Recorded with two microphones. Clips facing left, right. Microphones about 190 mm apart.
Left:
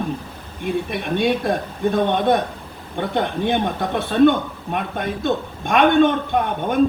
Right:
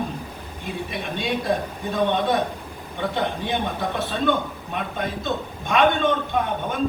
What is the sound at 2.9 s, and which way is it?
A man's voice, 55° left (ahead or behind).